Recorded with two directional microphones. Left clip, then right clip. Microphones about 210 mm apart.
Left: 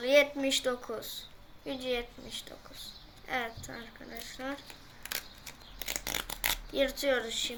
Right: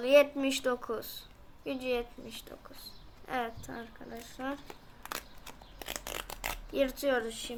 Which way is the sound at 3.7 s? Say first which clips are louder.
Right 1 dB; 40° right (ahead or behind).